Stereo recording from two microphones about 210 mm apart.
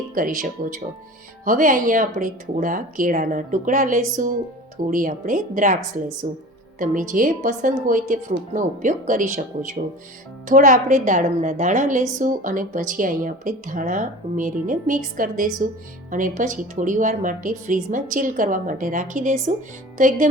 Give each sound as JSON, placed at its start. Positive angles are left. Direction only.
{"t": 0.1, "sound": "a woman's voice", "side_deg": -40}